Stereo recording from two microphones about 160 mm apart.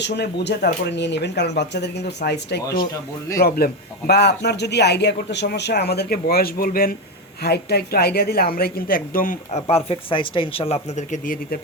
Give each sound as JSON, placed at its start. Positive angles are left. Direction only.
{"t": 0.0, "sound": "a man's voice", "side_deg": 90}
{"t": 3.3, "sound": "a man's voice", "side_deg": 70}
{"t": 7.4, "sound": "speech", "side_deg": 90}